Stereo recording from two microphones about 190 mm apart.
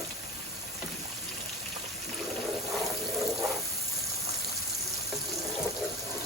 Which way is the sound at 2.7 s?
Centre (ahead or behind).